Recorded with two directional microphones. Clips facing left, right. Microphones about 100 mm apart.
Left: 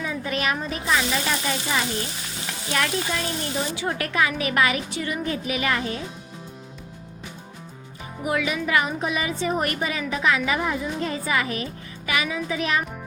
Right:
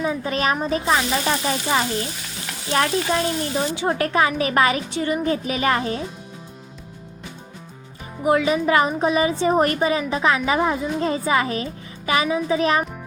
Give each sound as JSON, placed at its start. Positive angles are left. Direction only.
{"t": 0.0, "sound": "a woman's voice", "side_deg": -30}
{"t": 8.2, "sound": "a woman's voice", "side_deg": -30}